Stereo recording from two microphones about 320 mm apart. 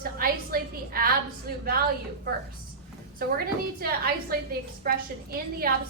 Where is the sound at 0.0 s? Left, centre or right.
Right.